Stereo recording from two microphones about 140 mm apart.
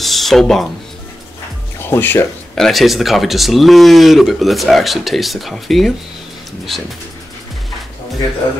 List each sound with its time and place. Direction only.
0.0 s speech: centre (ahead or behind)
1.9 s speech: 15° left (ahead or behind)
2.5 s speech: centre (ahead or behind)